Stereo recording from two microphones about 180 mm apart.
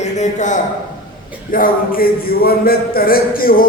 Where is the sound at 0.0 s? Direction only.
40° left (ahead or behind).